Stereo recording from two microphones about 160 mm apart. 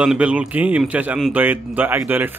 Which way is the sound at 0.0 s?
5° right (ahead or behind).